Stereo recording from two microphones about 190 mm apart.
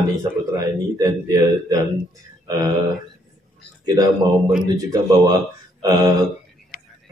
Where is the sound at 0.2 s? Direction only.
20° right (ahead or behind).